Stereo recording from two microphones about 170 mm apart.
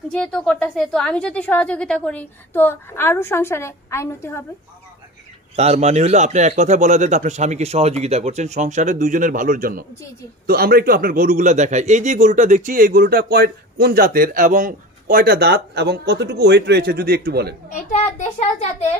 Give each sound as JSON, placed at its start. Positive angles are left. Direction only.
{"t": 0.1, "sound": "a woman's voice", "side_deg": 5}
{"t": 5.6, "sound": "a man's voice", "side_deg": -40}
{"t": 17.7, "sound": "a child's voice", "side_deg": 45}